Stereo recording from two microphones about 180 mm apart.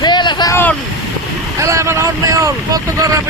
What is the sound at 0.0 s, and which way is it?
Vehicle, 25° left (ahead or behind).